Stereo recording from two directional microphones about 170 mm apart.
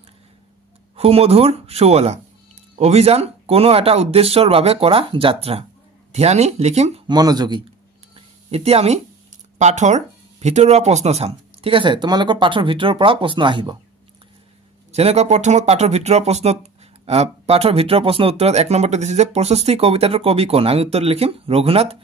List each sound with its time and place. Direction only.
0.9 s speech: 35° right (ahead or behind)
7.1 s speech: 25° right (ahead or behind)
8.5 s speech: 35° right (ahead or behind)
14.9 s speech: 40° right (ahead or behind)